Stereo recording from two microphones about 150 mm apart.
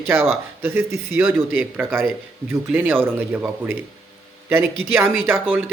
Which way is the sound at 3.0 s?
15° right (ahead or behind).